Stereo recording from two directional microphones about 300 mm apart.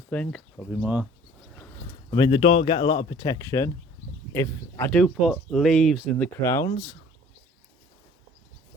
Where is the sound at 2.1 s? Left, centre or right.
Centre.